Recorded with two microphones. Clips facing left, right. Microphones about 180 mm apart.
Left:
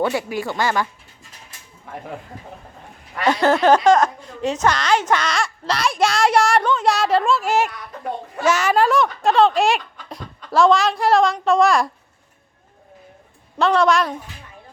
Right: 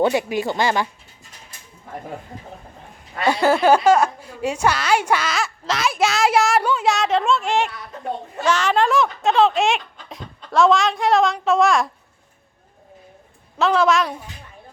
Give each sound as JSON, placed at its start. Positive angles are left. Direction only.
{"t": 0.0, "sound": "a woman's voice", "side_deg": -20}
{"t": 3.2, "sound": "a woman's voice", "side_deg": -10}
{"t": 13.6, "sound": "a woman's voice", "side_deg": 0}